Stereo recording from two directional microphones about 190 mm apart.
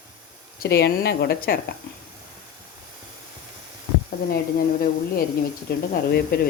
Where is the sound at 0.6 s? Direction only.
60° left (ahead or behind).